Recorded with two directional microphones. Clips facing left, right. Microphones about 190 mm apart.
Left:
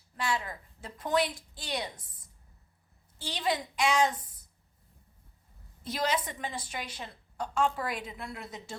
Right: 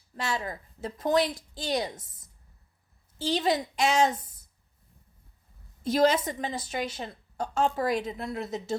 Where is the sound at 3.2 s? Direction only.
40° right (ahead or behind).